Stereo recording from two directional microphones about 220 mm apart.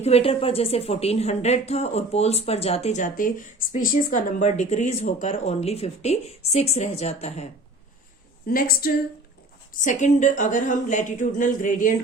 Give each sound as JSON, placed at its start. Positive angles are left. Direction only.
{"t": 0.0, "sound": "speech", "side_deg": 25}
{"t": 8.4, "sound": "speech", "side_deg": 40}